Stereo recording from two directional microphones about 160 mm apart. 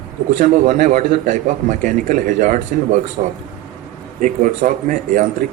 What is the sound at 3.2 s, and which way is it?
Speech, 40° right (ahead or behind).